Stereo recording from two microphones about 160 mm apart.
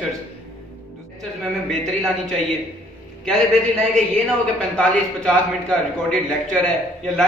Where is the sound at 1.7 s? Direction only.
Centre (ahead or behind).